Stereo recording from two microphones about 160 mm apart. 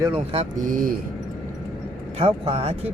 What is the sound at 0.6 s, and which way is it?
Speech, 60° right (ahead or behind).